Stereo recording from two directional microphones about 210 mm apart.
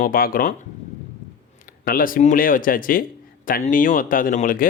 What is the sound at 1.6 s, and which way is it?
Speech, 45° left (ahead or behind).